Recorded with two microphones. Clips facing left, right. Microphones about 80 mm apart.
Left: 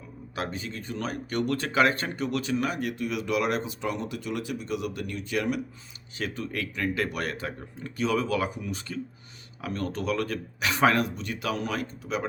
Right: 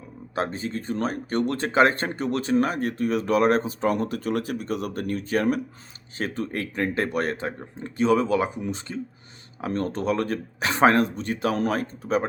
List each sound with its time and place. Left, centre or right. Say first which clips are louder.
0.3 s speech: right 6 dB; right